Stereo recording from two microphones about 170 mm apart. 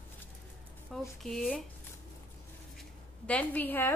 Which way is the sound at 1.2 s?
Centre (ahead or behind).